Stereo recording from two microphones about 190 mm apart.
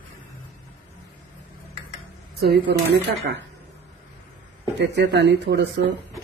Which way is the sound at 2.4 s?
55° right (ahead or behind).